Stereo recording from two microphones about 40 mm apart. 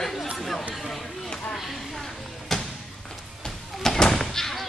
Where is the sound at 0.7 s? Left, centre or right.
Centre.